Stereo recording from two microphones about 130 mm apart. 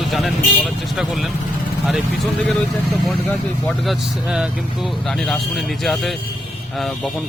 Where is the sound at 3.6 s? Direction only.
Centre (ahead or behind).